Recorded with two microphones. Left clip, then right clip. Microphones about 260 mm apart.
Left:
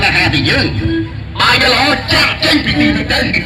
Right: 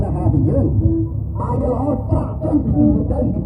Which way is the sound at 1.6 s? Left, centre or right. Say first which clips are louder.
Left 10 dB; left.